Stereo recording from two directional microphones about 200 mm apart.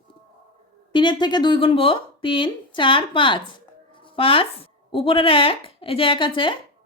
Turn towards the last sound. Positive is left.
turn(degrees=25)  # may be behind; listen again after turning